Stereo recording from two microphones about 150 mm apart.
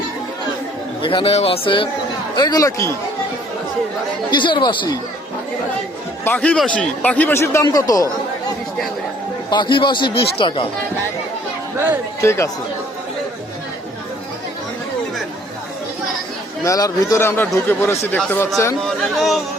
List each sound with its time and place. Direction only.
1.0 s speech: 35° left (ahead or behind); by 2.9 s 20° left (ahead or behind)
4.3 s speech: 30° left (ahead or behind)
6.2 s speech: 10° left (ahead or behind)
9.5 s speech: 30° left (ahead or behind)
12.2 s speech: 20° left (ahead or behind)
16.6 s speech: 25° left (ahead or behind)
18.9 s speech: centre (ahead or behind)